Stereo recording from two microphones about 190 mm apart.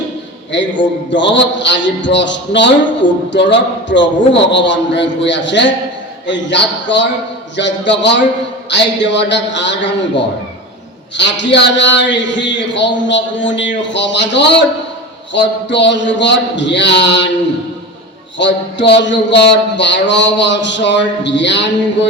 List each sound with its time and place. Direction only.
0.5 s a man's voice: 70° left (ahead or behind)
18.3 s a man's voice: 70° left (ahead or behind)